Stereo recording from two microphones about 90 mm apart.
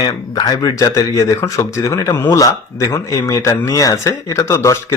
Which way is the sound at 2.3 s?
40° left (ahead or behind).